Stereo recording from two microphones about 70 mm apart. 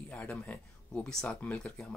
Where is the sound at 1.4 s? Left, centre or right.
Centre.